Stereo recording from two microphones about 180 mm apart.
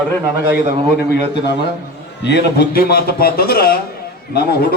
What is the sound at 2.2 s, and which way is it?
A man's voice, 65° left (ahead or behind).